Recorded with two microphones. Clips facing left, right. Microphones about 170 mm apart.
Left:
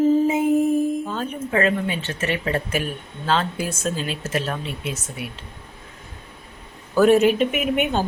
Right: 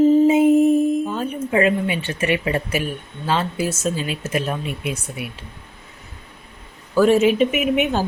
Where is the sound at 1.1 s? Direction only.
10° right (ahead or behind).